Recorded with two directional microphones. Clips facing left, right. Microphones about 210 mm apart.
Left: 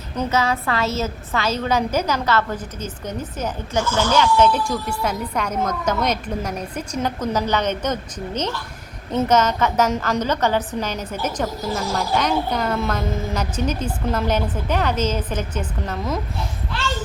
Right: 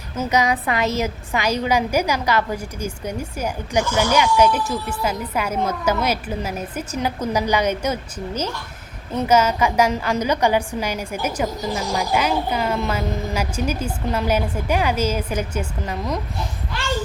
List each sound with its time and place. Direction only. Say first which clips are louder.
0.2 s a woman's voice: right 1 dB; 15° right (ahead or behind)
9.2 s a woman's voice: right 1 dB; 10° right (ahead or behind)